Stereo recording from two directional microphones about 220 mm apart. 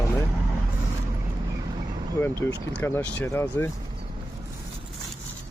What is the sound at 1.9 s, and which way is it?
Vehicle, 20° right (ahead or behind).